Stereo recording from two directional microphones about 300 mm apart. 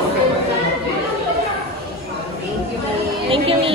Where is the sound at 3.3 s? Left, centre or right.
Centre.